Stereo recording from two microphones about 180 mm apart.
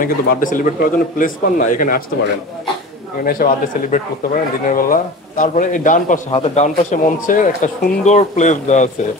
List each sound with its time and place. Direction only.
0.0 s a man's voice: 50° left (ahead or behind)
3.4 s speech: 55° left (ahead or behind)
4.6 s a man's voice: 50° left (ahead or behind)